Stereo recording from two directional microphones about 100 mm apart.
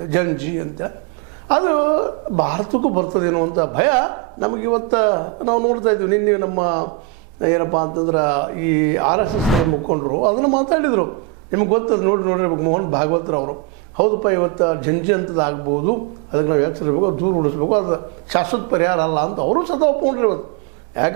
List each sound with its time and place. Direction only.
0.1 s a man's voice: 15° right (ahead or behind)
10.2 s a man's voice: 25° right (ahead or behind)